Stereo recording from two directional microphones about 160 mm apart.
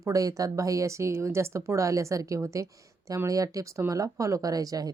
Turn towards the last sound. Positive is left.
turn(degrees=-20)  # may be behind; listen again after turning